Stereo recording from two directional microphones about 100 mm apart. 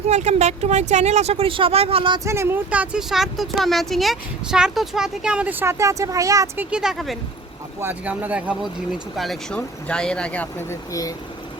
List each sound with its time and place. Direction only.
0.3 s speech: 90° right
2.2 s speech: 25° right (ahead or behind)
2.6 s speech: 15° right (ahead or behind)
3.1 s speech: centre (ahead or behind); by 6.5 s 35° right (ahead or behind)
6.6 s speech: 10° right (ahead or behind)
7.8 s speech: 20° right (ahead or behind)
8.6 s speech: centre (ahead or behind)
9.6 s speech: 10° left (ahead or behind)
10.7 s speech: 35° left (ahead or behind)